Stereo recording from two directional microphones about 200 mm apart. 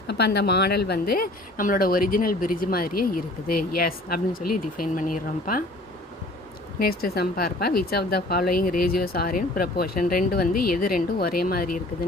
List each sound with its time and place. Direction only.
0.1 s a woman's voice: 55° left (ahead or behind)
6.7 s a woman's voice: 50° left (ahead or behind)